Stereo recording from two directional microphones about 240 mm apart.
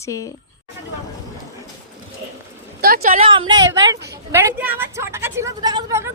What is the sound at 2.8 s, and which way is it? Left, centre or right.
Speech, right.